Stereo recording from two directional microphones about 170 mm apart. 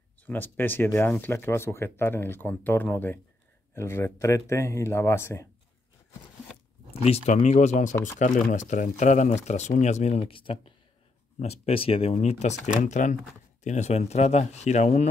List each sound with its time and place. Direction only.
0.2 s speech: 10° left (ahead or behind)
6.9 s speech: 35° left (ahead or behind)